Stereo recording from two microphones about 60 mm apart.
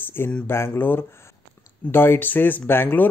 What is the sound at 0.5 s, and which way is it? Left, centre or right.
Speech, left.